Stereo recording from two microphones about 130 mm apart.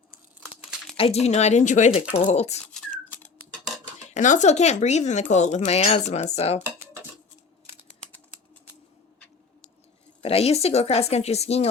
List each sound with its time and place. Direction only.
0.9 s speech: 50° left (ahead or behind); by 1.9 s 70° left (ahead or behind)
2.1 s speech: 60° left (ahead or behind)
2.7 s a sound: 10° left (ahead or behind)
4.1 s speech: 70° left (ahead or behind)
10.2 s speech: 50° left (ahead or behind)